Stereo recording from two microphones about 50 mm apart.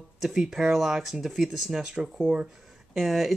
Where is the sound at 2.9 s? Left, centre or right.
Centre.